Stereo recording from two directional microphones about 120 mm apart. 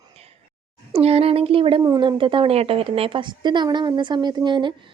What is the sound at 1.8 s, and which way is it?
A woman's voice, 35° right (ahead or behind).